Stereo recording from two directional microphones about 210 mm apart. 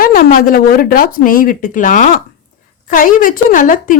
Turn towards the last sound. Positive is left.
turn(degrees=40)  # may be behind; listen again after turning